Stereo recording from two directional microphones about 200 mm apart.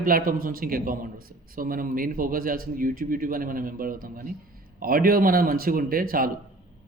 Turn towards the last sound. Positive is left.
turn(degrees=-45)  # may be behind; listen again after turning